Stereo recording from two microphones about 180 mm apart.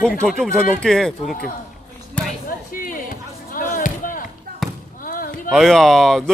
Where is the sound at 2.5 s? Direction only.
50° left (ahead or behind).